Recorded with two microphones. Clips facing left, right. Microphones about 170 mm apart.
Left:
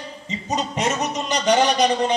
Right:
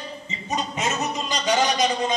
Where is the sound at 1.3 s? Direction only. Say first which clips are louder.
Left 5 dB; 65° left (ahead or behind).